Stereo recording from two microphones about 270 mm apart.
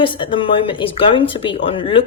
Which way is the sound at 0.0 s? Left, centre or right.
Centre.